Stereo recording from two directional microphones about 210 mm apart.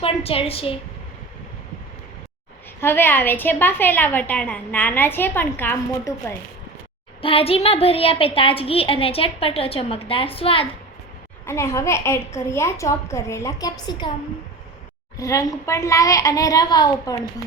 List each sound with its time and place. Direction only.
0.0 s a woman's voice: 25° left (ahead or behind)
2.8 s a woman's voice: 10° left (ahead or behind)
7.2 s a woman's voice: 25° left (ahead or behind)
11.4 s a woman's voice: 15° left (ahead or behind)
15.2 s a woman's voice: 15° left (ahead or behind)